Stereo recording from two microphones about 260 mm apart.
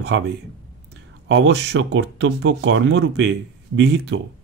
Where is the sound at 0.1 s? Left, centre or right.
Right.